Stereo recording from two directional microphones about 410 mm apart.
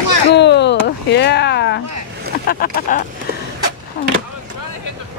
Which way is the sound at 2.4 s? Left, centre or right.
Left.